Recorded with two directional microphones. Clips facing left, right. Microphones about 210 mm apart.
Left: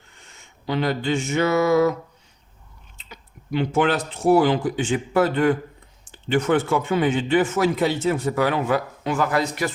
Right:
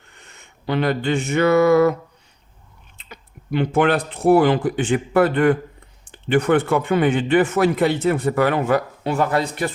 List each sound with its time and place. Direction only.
0.1 s speech: 60° right (ahead or behind)
3.0 s speech: 55° right (ahead or behind)
9.0 s speech: 35° right (ahead or behind)